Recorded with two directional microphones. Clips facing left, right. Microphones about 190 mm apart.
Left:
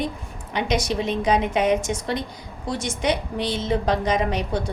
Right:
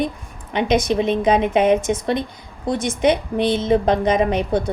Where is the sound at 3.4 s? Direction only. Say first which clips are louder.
Right 7 dB; 55° right (ahead or behind).